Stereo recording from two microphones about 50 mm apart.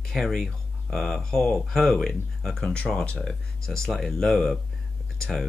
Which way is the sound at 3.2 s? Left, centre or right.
Centre.